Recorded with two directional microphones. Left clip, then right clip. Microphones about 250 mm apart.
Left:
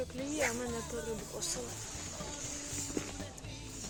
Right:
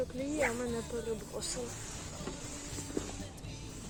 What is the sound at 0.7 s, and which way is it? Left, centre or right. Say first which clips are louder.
Speech: right 2 dB; centre.